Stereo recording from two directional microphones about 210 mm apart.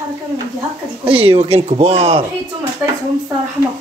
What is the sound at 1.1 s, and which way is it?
Speech, 25° right (ahead or behind).